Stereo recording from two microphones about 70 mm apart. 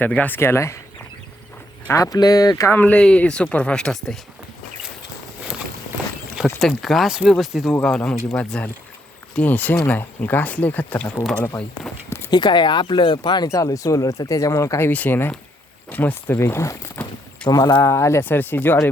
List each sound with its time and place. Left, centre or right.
0.0 s speech: left
0.3 s speech: left
1.9 s speech: left
2.1 s speech: left
2.7 s speech: centre
6.6 s speech: centre
7.8 s speech: centre
12.3 s speech: left
13.5 s speech: left
14.8 s speech: left
16.4 s speech: left
17.5 s speech: left
17.8 s speech: left
18.2 s speech: left